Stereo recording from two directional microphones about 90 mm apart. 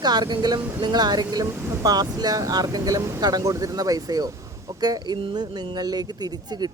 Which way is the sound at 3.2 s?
45° right (ahead or behind).